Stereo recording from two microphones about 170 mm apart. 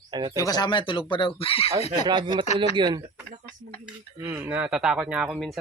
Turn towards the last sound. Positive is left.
turn(degrees=-5)  # may be behind; listen again after turning